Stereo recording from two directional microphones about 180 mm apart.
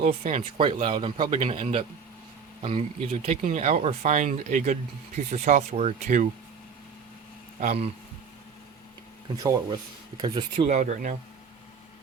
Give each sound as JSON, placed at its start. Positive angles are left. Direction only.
{"t": 0.0, "sound": "speech", "side_deg": -35}
{"t": 7.6, "sound": "speech", "side_deg": -35}
{"t": 10.2, "sound": "speech", "side_deg": -25}
{"t": 10.8, "sound": "speech", "side_deg": -45}